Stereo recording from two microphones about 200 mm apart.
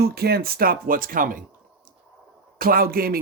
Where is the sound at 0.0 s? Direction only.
50° right (ahead or behind).